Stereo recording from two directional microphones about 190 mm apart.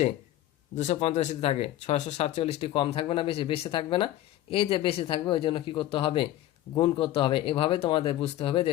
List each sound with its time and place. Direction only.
0.8 s speech: 35° left (ahead or behind)